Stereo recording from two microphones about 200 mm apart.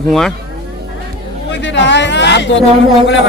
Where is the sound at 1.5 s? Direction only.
65° left (ahead or behind).